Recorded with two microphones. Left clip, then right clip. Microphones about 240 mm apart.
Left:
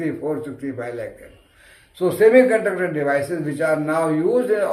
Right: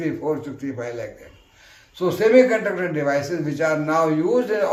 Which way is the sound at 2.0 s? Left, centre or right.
Centre.